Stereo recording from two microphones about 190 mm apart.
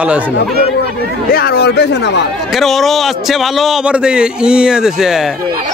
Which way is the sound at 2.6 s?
Centre (ahead or behind).